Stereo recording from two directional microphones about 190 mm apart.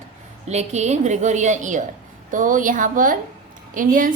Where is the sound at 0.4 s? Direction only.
35° right (ahead or behind).